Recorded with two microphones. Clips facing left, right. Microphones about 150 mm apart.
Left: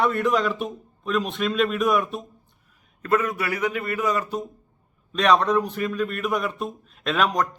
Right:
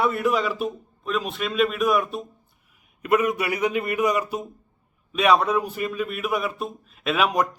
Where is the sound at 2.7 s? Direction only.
10° right (ahead or behind).